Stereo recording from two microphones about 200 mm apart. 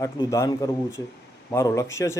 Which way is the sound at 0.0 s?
15° left (ahead or behind).